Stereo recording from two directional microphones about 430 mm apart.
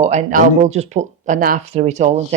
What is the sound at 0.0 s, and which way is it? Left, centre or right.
Speech, centre.